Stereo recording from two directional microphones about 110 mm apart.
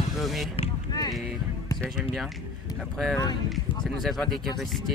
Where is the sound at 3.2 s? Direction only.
40° left (ahead or behind).